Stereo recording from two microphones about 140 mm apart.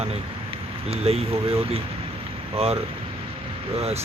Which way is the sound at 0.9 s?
45° right (ahead or behind).